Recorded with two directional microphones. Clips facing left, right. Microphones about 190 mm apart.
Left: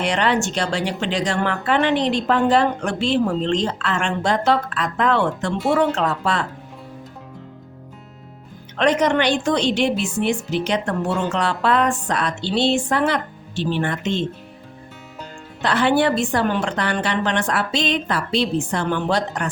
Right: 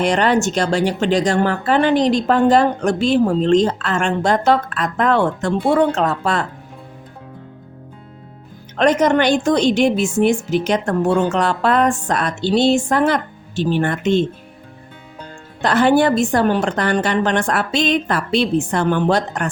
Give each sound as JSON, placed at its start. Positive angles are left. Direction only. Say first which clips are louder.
{"t": 0.0, "sound": "speech", "louder": "right 4 dB", "side_deg": -45}
{"t": 8.7, "sound": "speech", "louder": "right 3 dB", "side_deg": -45}
{"t": 15.6, "sound": "speech", "louder": "right 4 dB", "side_deg": -45}